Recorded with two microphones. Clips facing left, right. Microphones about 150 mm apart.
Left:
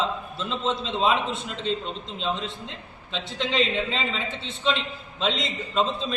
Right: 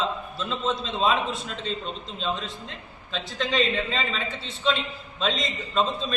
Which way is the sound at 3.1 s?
20° left (ahead or behind).